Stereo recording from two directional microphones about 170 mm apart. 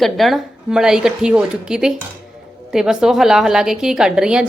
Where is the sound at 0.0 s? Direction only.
Centre (ahead or behind).